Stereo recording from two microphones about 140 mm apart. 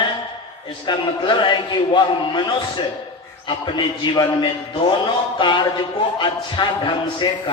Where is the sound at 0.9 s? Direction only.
35° left (ahead or behind).